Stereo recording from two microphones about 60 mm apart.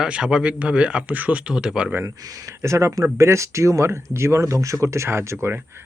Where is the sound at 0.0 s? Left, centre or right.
Centre.